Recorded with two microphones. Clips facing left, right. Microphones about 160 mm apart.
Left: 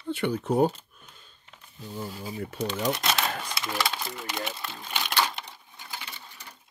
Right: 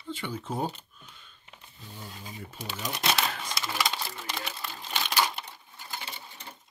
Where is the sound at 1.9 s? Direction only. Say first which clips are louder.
Left 9 dB; 70° left (ahead or behind).